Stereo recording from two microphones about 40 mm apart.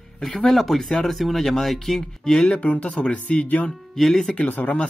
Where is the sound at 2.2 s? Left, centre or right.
Centre.